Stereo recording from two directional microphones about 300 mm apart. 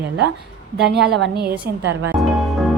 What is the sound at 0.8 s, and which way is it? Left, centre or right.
Speech, right.